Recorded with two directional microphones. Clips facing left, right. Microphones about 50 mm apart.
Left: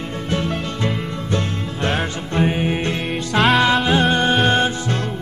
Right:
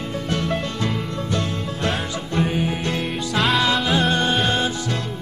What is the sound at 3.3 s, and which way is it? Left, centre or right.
Music, centre.